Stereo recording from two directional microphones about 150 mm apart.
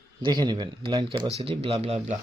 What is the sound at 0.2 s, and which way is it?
Speech, 30° right (ahead or behind).